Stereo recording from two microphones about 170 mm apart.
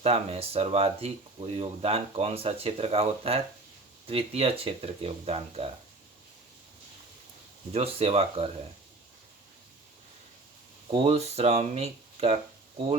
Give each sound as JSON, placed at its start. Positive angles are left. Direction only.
{"t": 0.0, "sound": "speech", "side_deg": -35}
{"t": 7.7, "sound": "speech", "side_deg": -35}
{"t": 10.9, "sound": "speech", "side_deg": -35}